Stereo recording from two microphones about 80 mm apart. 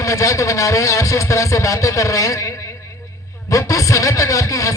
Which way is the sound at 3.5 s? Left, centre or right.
Left.